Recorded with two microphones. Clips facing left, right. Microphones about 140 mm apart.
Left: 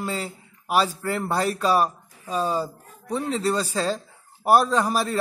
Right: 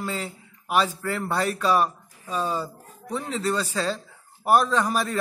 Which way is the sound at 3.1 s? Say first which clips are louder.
Left 3 dB; 35° left (ahead or behind).